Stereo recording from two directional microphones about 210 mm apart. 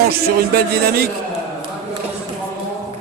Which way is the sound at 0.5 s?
45° right (ahead or behind).